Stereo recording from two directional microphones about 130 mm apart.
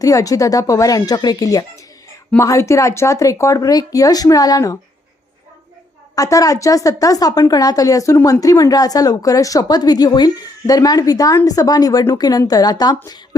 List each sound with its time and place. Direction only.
0.0 s speech: 25° left (ahead or behind)
6.1 s speech: 25° left (ahead or behind)